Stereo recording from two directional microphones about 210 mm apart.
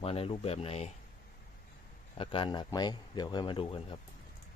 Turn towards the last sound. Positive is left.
turn(degrees=25)  # may be behind; listen again after turning